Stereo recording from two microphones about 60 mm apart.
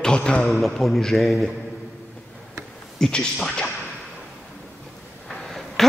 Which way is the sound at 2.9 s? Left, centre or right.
Centre.